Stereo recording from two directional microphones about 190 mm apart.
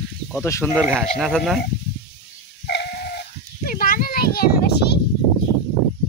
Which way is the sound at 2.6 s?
60° left (ahead or behind).